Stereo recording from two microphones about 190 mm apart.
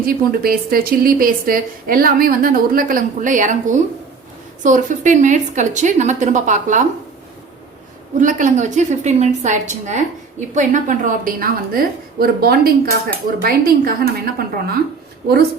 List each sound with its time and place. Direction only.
0.0 s a woman's voice: 50° right (ahead or behind)
8.2 s a woman's voice: 40° right (ahead or behind)